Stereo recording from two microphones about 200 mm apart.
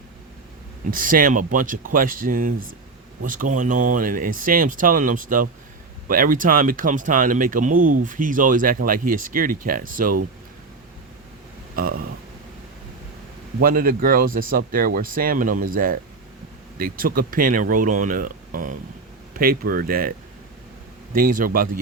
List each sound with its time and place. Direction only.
0.9 s speech: 45° right (ahead or behind)
11.8 s speech: 45° right (ahead or behind)
13.6 s speech: 45° right (ahead or behind)